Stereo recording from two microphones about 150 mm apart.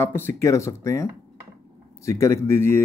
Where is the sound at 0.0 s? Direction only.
15° left (ahead or behind).